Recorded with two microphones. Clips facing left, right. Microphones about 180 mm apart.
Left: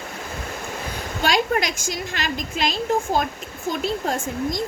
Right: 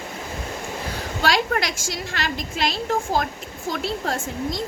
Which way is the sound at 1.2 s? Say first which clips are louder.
Left 1 dB; 20° left (ahead or behind).